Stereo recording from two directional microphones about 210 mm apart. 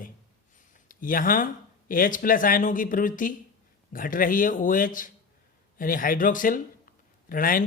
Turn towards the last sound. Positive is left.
turn(degrees=40)  # may be behind; listen again after turning